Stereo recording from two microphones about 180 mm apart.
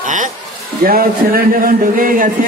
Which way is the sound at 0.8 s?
55° right (ahead or behind).